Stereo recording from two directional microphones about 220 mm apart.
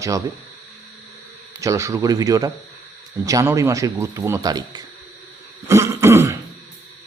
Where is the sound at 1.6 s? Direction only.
15° right (ahead or behind).